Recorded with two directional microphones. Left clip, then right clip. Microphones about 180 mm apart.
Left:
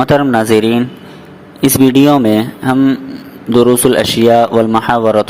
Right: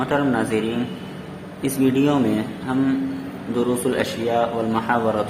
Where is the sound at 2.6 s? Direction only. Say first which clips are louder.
Left 10 dB; 35° left (ahead or behind).